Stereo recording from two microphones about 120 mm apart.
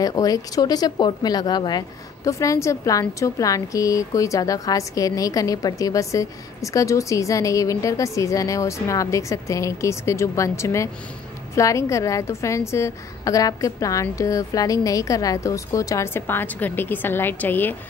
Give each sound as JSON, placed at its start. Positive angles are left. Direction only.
{"t": 0.0, "sound": "speech", "side_deg": 30}